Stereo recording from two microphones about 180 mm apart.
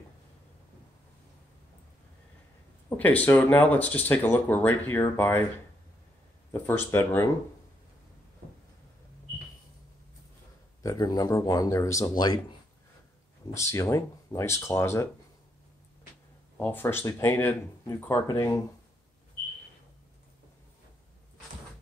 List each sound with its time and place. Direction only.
3.0 s speech: 10° left (ahead or behind)
6.5 s speech: 10° left (ahead or behind)
10.8 s speech: 20° left (ahead or behind)
16.5 s speech: 10° left (ahead or behind)